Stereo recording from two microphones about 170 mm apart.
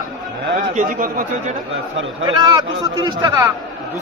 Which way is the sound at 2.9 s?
25° right (ahead or behind).